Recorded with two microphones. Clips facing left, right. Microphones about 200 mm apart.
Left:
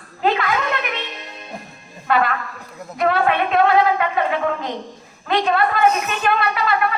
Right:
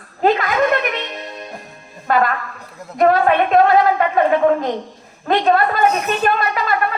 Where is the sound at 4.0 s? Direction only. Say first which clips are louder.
Right 4 dB; 45° right (ahead or behind).